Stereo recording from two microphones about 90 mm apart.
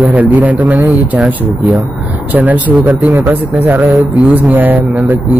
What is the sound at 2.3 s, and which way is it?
Speech, 20° right (ahead or behind).